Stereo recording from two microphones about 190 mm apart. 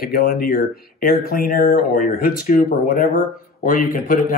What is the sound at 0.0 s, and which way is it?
Speech, 50° left (ahead or behind).